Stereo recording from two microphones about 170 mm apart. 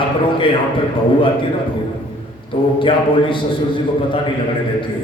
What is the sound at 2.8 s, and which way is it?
A man's voice, 30° left (ahead or behind).